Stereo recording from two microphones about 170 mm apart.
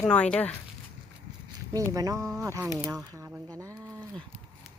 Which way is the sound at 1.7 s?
20° right (ahead or behind).